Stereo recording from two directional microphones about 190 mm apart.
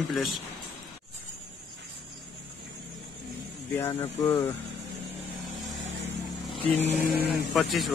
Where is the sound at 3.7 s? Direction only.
15° left (ahead or behind).